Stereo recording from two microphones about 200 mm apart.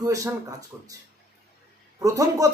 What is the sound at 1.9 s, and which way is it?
Speech, 15° right (ahead or behind).